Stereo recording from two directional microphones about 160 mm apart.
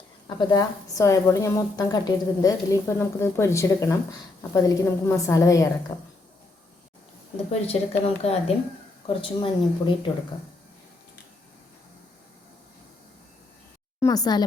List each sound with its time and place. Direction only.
0.3 s a woman's voice: 25° left (ahead or behind)
7.7 s speech: 40° left (ahead or behind)
14.0 s a woman's voice: 25° left (ahead or behind)